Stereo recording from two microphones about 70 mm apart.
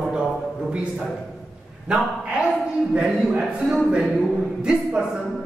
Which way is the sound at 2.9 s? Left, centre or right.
Centre.